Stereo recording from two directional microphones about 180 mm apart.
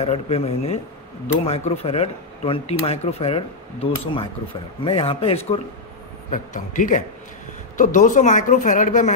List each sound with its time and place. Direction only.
0.0 s speech: 35° left (ahead or behind)
6.3 s speech: 45° left (ahead or behind)